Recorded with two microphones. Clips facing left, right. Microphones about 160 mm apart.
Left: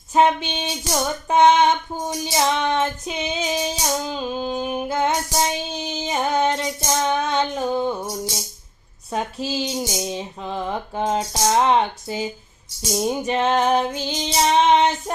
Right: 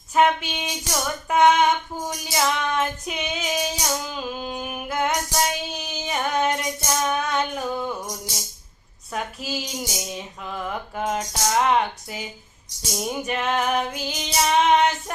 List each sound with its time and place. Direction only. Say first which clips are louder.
0.1 s music: left 2 dB; 30° left (ahead or behind)
4.1 s female singing: left 5 dB; 25° left (ahead or behind)
9.1 s music: left 4 dB; 30° left (ahead or behind)